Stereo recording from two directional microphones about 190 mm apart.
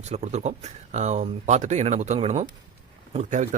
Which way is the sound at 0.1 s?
35° right (ahead or behind).